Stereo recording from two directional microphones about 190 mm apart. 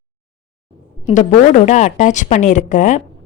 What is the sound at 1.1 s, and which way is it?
A woman's voice, 40° left (ahead or behind).